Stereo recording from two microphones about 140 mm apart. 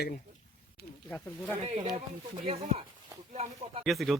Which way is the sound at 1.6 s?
50° right (ahead or behind).